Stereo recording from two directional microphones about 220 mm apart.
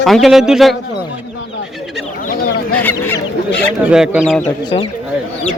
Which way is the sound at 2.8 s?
10° left (ahead or behind).